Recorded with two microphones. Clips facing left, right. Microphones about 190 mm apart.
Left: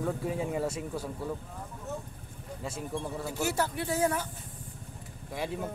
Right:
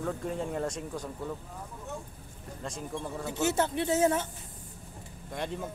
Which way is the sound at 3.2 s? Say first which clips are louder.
Right 4 dB; 20° right (ahead or behind).